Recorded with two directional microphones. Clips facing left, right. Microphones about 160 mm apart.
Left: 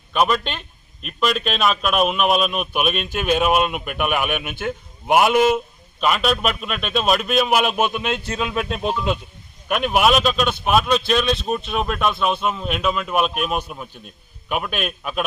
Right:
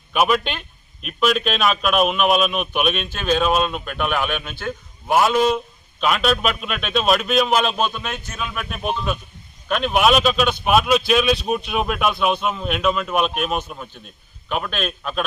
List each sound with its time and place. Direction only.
0.1 s a man's voice: 5° right (ahead or behind); by 5.4 s 20° left (ahead or behind)
6.0 s a man's voice: centre (ahead or behind); by 8.9 s 25° left (ahead or behind)
9.6 s a man's voice: 10° left (ahead or behind)